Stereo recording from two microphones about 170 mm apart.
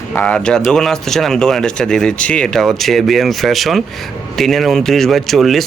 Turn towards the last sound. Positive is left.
turn(degrees=0)  # may be behind; listen again after turning